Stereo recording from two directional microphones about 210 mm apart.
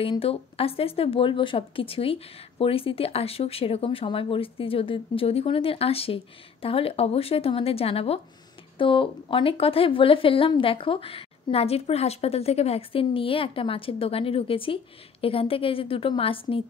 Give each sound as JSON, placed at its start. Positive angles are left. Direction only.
{"t": 0.0, "sound": "speech", "side_deg": 25}